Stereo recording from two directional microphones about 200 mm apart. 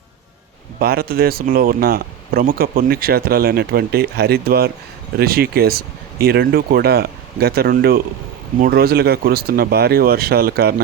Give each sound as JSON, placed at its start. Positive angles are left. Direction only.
{"t": 0.8, "sound": "speech", "side_deg": -50}